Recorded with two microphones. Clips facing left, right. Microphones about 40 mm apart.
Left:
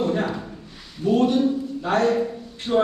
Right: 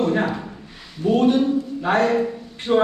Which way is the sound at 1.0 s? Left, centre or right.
Right.